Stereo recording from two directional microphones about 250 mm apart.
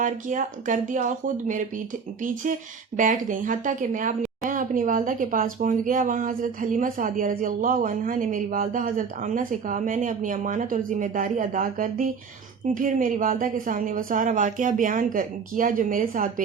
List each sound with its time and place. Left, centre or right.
0.0 s speech: right